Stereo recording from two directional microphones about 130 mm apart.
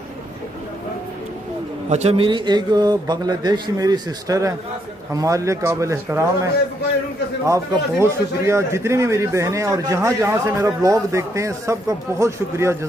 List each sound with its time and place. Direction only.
1.9 s a man's voice: 55° right (ahead or behind)
2.2 s a man's voice: 35° right (ahead or behind); by 12.7 s 20° right (ahead or behind)